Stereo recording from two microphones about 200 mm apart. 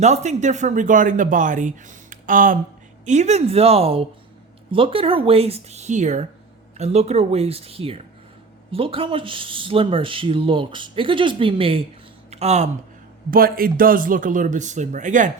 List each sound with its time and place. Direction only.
0.0 s speech: 35° right (ahead or behind)
13.3 s speech: 45° right (ahead or behind)